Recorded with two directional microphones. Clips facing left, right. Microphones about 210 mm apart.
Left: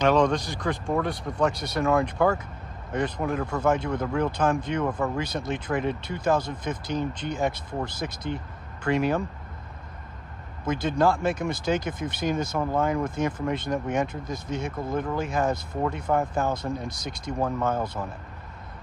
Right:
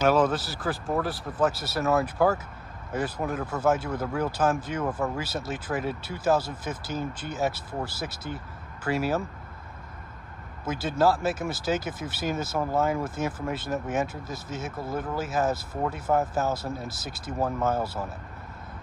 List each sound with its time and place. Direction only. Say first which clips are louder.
0.0 s speech: left 1 dB; 5° right (ahead or behind)
10.6 s speech: left 1 dB; 5° right (ahead or behind)